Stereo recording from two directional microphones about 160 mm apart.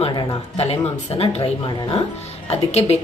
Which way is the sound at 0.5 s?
40° left (ahead or behind).